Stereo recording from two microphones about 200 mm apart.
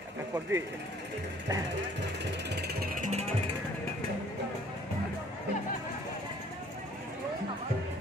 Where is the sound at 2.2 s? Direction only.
55° right (ahead or behind); by 3.2 s 40° right (ahead or behind).